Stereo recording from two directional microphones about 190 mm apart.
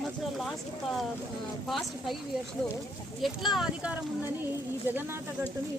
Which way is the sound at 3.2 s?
Centre (ahead or behind).